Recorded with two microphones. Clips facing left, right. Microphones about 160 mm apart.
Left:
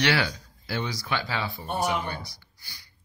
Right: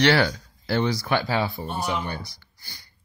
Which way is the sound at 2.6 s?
50° right (ahead or behind).